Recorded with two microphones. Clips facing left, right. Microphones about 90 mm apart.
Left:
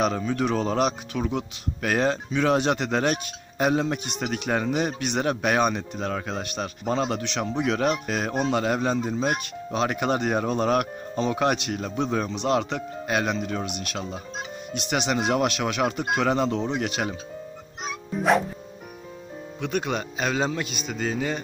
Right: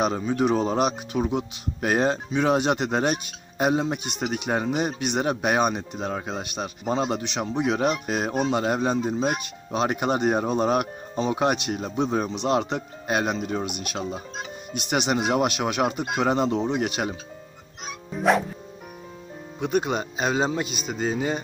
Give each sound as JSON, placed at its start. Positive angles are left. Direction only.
{"t": 0.0, "sound": "speech", "side_deg": -20}
{"t": 14.7, "sound": "speech", "side_deg": -15}
{"t": 18.1, "sound": "music", "side_deg": 0}
{"t": 19.6, "sound": "speech", "side_deg": -10}
{"t": 20.0, "sound": "speech", "side_deg": -30}
{"t": 20.7, "sound": "music", "side_deg": -5}
{"t": 21.0, "sound": "speech", "side_deg": -20}